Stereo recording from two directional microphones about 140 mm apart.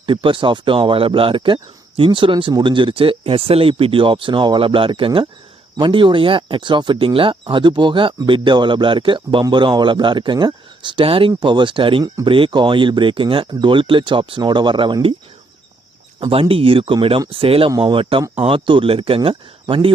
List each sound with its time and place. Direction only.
0.0 s speech: 40° right (ahead or behind)
16.3 s speech: 40° right (ahead or behind)